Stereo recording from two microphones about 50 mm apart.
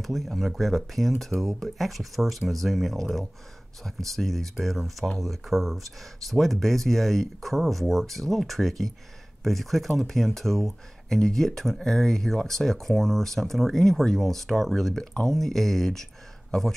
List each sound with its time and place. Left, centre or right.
0.0 s speech: centre